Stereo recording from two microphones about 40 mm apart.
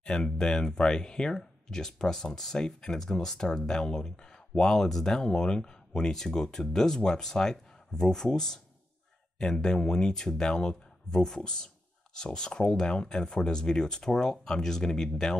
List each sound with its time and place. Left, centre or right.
0.0 s speech: centre